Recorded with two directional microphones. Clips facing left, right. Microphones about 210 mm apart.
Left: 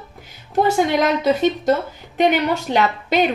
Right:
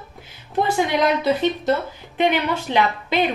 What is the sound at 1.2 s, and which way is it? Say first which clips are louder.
A woman's voice: left 3 dB; 45° left (ahead or behind).